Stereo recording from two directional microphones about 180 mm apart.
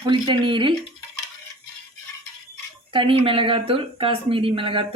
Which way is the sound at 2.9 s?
30° right (ahead or behind).